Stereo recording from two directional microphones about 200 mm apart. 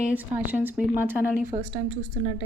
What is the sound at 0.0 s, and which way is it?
A woman's voice, 10° right (ahead or behind).